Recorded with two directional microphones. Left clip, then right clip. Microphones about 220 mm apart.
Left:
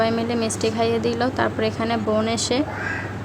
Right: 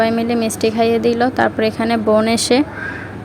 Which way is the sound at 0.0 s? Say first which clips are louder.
Right 5 dB; 20° right (ahead or behind).